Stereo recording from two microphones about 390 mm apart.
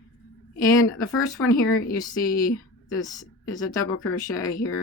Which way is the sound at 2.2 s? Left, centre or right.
Left.